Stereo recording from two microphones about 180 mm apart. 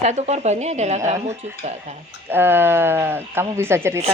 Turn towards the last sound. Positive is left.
turn(degrees=-15)  # may be behind; listen again after turning